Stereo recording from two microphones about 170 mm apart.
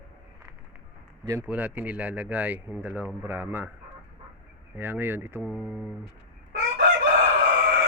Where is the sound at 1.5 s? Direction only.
10° right (ahead or behind).